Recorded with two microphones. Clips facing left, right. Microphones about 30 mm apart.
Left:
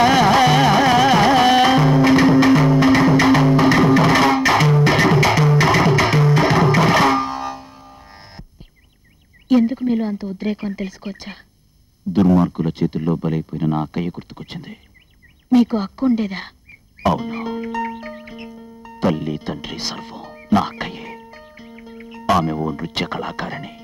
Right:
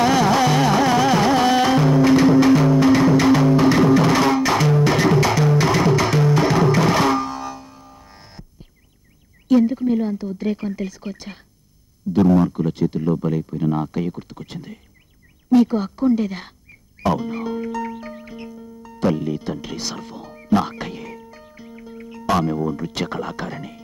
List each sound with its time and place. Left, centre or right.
0.0 s music: left
9.5 s speech: left
17.0 s music: left